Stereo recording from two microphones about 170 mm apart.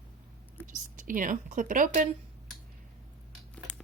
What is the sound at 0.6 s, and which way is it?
A woman's voice, 50° right (ahead or behind).